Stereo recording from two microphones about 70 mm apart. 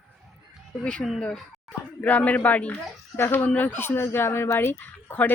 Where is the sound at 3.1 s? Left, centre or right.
Left.